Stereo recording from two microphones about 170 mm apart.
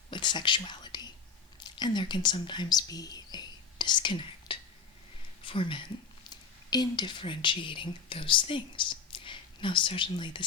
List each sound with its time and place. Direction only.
0.1 s whispering: 25° left (ahead or behind)
1.5 s speech: 25° left (ahead or behind)